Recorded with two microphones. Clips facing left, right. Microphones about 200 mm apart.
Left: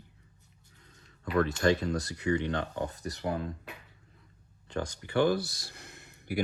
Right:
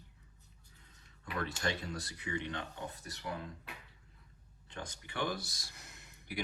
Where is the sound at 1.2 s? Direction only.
90° left.